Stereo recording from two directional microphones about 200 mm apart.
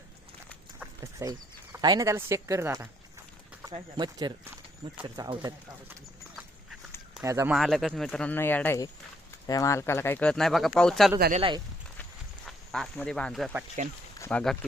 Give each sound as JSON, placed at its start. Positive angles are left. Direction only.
{"t": 0.8, "sound": "speech", "side_deg": -15}
{"t": 7.1, "sound": "speech", "side_deg": -15}
{"t": 7.5, "sound": "speech", "side_deg": 0}
{"t": 11.3, "sound": "speech", "side_deg": -25}
{"t": 12.5, "sound": "speech", "side_deg": 0}